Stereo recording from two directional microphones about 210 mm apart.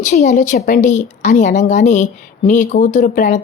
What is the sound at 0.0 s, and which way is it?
Speech, 35° left (ahead or behind).